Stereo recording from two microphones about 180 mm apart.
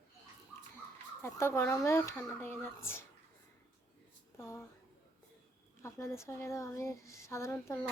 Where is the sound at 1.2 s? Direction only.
15° left (ahead or behind).